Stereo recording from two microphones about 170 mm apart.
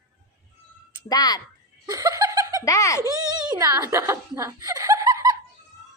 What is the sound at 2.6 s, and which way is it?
Speech, 20° left (ahead or behind).